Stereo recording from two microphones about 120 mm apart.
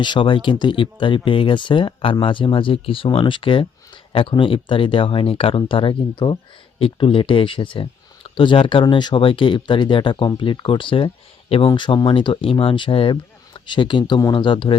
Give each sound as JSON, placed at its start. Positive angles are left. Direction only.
{"t": 0.0, "sound": "speech", "side_deg": 40}
{"t": 11.7, "sound": "speech", "side_deg": 40}